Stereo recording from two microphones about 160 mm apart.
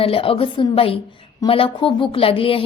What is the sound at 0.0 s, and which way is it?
Speech, 35° left (ahead or behind).